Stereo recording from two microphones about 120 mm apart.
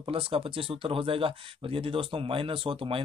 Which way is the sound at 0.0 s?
50° right (ahead or behind).